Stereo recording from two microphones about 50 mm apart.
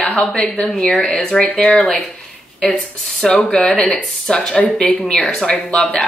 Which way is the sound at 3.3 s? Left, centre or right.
Left.